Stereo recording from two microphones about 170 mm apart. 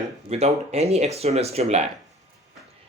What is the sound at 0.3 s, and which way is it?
Speech, 40° right (ahead or behind).